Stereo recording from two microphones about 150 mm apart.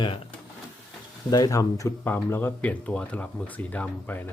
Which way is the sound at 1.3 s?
25° left (ahead or behind).